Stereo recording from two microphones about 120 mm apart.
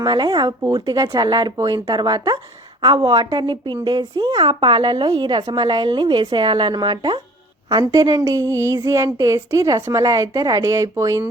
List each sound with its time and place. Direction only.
0.0 s a woman's voice: 40° right (ahead or behind)